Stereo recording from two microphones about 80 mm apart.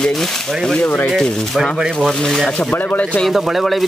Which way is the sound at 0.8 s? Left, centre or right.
Left.